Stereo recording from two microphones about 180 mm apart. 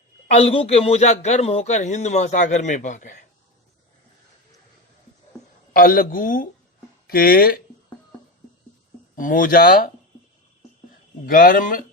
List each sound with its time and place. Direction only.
0.3 s a man's voice: 35° left (ahead or behind)
5.7 s speech: 50° left (ahead or behind)
9.1 s speech: 50° left (ahead or behind)
11.3 s speech: 50° left (ahead or behind)